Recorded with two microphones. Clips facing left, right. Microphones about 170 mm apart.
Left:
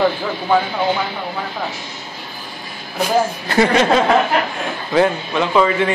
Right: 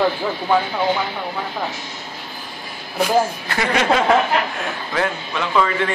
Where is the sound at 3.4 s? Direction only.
35° left (ahead or behind).